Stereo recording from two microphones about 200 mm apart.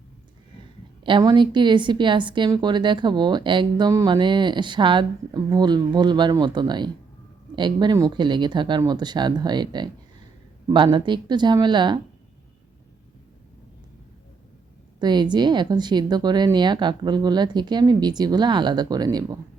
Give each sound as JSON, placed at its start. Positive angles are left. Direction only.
{"t": 1.0, "sound": "a woman's voice", "side_deg": -25}
{"t": 14.9, "sound": "a woman's voice", "side_deg": -20}